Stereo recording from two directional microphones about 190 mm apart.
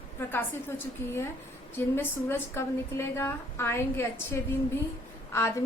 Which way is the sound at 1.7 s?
10° left (ahead or behind).